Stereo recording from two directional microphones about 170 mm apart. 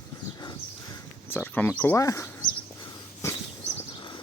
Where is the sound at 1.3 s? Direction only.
15° left (ahead or behind).